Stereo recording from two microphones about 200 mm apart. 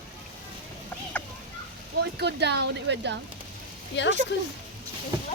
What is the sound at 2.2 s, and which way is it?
Speech, 55° right (ahead or behind).